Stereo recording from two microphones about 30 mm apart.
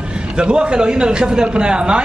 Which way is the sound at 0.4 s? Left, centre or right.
Right.